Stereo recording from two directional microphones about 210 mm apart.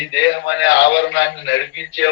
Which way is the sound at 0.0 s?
60° left (ahead or behind).